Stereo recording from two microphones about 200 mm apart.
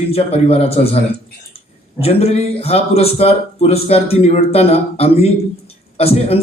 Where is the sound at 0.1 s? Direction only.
30° left (ahead or behind).